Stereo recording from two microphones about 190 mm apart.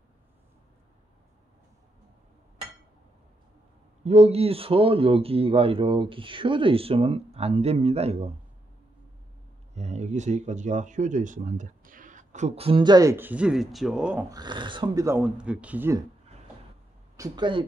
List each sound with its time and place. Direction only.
4.0 s speech: 35° right (ahead or behind)
9.8 s speech: 35° right (ahead or behind); by 14.2 s 5° right (ahead or behind)
14.3 s speech: 25° right (ahead or behind)
15.1 s speech: 5° right (ahead or behind)
17.2 s speech: 25° right (ahead or behind)